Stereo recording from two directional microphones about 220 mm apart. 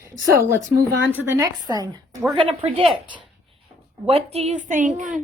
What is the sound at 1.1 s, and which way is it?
A woman's voice, 15° right (ahead or behind).